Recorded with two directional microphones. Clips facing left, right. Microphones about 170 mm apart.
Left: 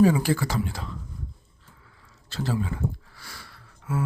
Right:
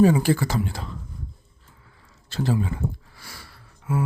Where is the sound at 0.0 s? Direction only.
25° right (ahead or behind).